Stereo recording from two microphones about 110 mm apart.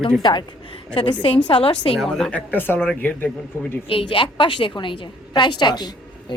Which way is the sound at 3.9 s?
55° left (ahead or behind).